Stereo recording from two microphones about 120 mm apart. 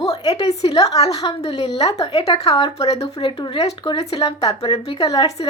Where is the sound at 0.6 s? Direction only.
40° left (ahead or behind).